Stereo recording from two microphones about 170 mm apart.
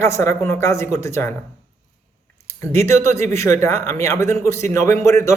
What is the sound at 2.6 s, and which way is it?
Speech, 15° left (ahead or behind).